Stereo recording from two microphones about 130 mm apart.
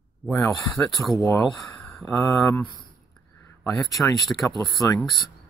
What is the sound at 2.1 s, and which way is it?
Speech, 25° left (ahead or behind).